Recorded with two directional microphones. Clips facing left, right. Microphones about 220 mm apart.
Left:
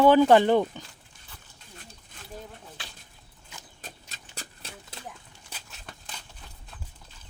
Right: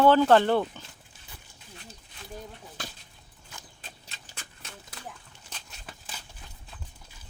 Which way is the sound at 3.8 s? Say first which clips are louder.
Left 8 dB; 45° left (ahead or behind).